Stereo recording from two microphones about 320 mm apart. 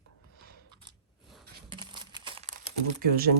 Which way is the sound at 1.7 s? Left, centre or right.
Centre.